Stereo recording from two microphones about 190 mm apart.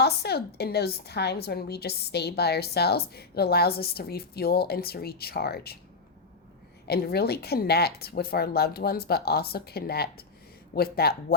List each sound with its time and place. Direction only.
0.0 s a woman's voice: 60° left (ahead or behind)
6.8 s a woman's voice: 55° left (ahead or behind)